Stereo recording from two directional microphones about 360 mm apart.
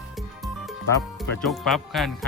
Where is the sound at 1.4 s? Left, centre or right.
Centre.